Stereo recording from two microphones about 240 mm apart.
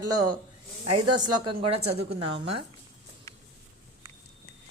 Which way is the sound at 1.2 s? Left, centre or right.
Right.